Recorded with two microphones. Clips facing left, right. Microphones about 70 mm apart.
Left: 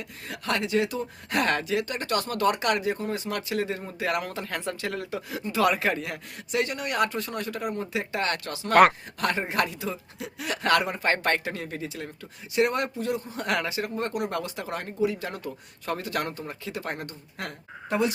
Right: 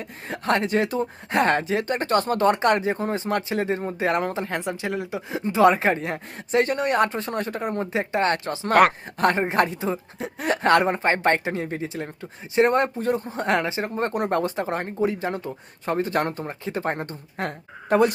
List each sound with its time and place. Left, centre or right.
0.0 s speech: right
8.8 s speech: centre
9.1 s speech: right